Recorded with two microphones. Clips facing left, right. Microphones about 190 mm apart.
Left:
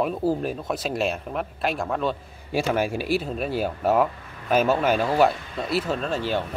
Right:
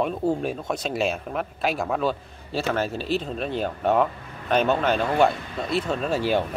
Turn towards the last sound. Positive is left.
turn(degrees=-10)  # may be behind; listen again after turning